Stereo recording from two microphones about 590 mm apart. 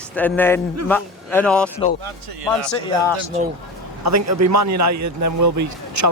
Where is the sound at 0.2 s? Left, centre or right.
Centre.